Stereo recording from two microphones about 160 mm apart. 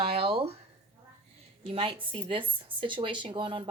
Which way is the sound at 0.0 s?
35° right (ahead or behind).